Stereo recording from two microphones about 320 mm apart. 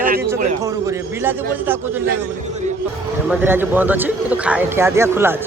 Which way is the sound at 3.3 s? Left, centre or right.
Centre.